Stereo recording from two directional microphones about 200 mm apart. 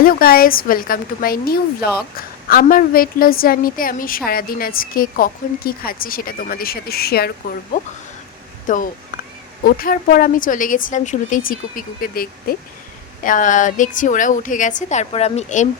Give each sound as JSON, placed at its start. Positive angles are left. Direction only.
{"t": 0.0, "sound": "a woman's voice", "side_deg": 45}